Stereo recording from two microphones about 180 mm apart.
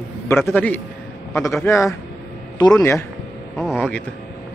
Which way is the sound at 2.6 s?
20° left (ahead or behind).